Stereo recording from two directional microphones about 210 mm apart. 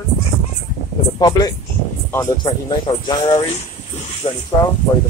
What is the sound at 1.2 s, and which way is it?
Speech, 15° left (ahead or behind).